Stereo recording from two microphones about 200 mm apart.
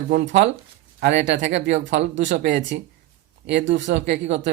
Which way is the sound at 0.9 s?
60° right (ahead or behind).